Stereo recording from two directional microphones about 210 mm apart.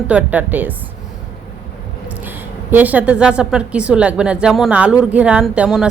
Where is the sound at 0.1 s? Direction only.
5° right (ahead or behind).